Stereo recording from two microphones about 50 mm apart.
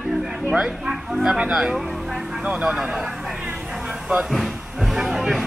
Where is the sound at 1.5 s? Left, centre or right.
Centre.